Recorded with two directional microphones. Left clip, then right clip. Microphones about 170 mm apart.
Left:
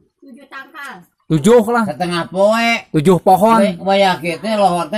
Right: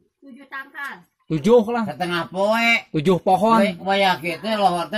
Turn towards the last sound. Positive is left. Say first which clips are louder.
# left 5 dB
turn(degrees=5)  # may be behind; listen again after turning